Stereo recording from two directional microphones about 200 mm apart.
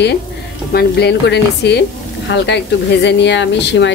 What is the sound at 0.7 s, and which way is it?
Speech, 55° left (ahead or behind).